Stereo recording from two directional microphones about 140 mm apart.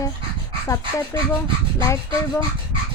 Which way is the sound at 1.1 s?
20° left (ahead or behind).